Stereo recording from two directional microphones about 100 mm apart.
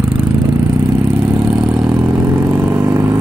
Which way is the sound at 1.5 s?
10° right (ahead or behind).